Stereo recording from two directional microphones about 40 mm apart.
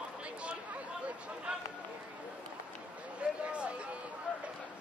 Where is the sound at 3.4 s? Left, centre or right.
Right.